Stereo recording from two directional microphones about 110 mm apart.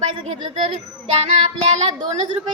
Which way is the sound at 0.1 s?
65° right (ahead or behind).